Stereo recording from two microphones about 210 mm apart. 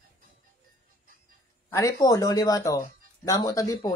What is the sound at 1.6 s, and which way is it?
Speech, 15° left (ahead or behind).